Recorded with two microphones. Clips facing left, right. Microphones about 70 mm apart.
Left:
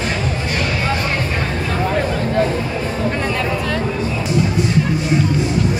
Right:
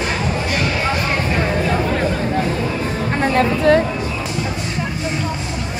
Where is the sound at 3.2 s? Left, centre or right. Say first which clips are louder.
Right 5 dB; right.